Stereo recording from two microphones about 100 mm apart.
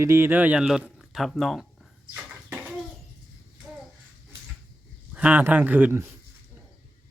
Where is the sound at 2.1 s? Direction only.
15° right (ahead or behind).